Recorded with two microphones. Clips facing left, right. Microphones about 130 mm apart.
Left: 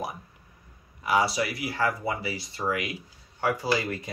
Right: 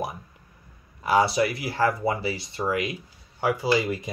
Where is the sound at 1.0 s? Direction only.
25° right (ahead or behind).